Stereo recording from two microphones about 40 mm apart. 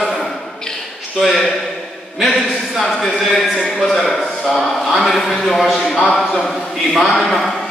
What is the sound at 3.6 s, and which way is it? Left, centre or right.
Speech, centre.